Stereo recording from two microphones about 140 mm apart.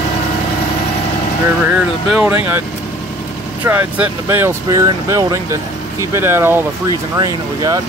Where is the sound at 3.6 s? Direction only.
15° right (ahead or behind).